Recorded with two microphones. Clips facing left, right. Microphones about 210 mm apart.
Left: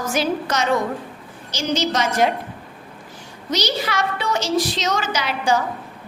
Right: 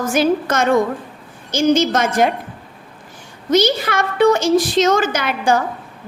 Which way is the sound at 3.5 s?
50° right (ahead or behind).